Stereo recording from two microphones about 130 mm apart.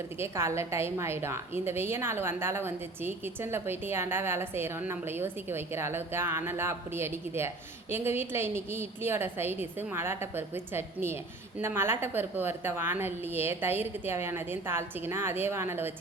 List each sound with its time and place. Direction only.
0.2 s a woman's voice: 20° right (ahead or behind)